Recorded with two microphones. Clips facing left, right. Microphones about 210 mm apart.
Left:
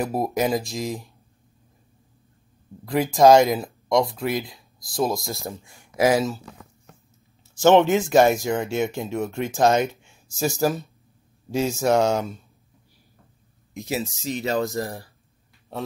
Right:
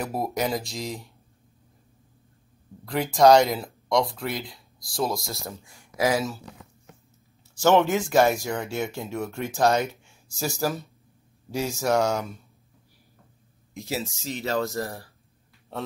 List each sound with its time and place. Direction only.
0.0 s speech: 20° left (ahead or behind)
2.8 s speech: 20° left (ahead or behind)
7.5 s speech: 20° left (ahead or behind)
13.7 s speech: 20° left (ahead or behind)